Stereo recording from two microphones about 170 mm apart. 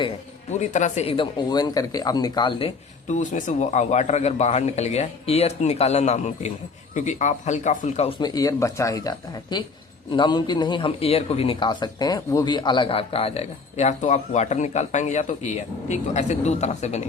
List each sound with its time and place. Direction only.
0.6 s speech: 45° left (ahead or behind)
1.1 s speech: 25° left (ahead or behind)
8.2 s speech: 20° left (ahead or behind); by 17.0 s 40° left (ahead or behind)